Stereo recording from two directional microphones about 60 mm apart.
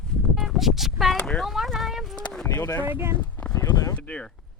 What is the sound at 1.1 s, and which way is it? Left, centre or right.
Speech, centre.